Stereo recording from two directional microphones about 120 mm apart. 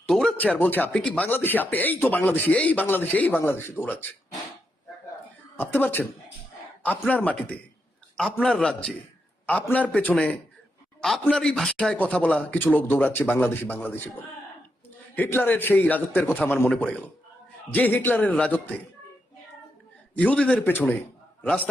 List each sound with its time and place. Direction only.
0.1 s speech: 5° left (ahead or behind)
5.5 s speech: 15° left (ahead or behind)
7.1 s speech: 10° left (ahead or behind)
15.1 s speech: 15° left (ahead or behind)
20.1 s speech: 10° left (ahead or behind)